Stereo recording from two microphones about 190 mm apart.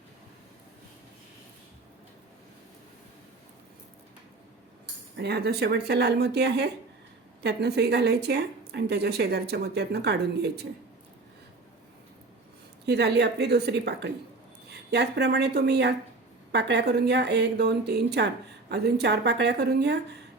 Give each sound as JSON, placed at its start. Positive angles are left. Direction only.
{"t": 5.1, "sound": "a woman's voice", "side_deg": -60}
{"t": 12.8, "sound": "a woman's voice", "side_deg": -60}